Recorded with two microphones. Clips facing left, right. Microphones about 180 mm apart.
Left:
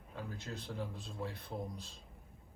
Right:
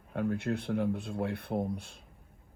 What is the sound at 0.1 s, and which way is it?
Speech, 60° right (ahead or behind).